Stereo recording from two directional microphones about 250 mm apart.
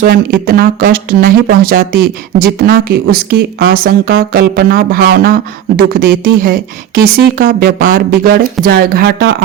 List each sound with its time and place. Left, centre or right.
0.0 s speech: right